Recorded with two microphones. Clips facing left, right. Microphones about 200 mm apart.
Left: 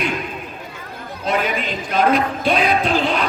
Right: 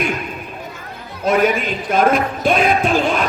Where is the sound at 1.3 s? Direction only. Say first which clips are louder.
Right 5 dB; 45° right (ahead or behind).